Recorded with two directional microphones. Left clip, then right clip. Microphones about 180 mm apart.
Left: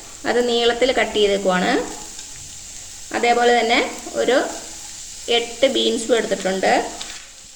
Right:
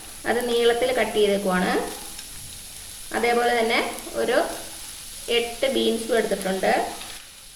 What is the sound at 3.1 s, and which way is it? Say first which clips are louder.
Speech: left 5 dB; 45° left (ahead or behind).